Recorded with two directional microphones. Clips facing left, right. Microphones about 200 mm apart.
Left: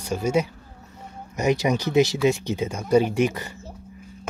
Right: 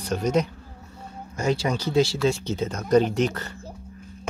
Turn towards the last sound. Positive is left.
turn(degrees=15)  # may be behind; listen again after turning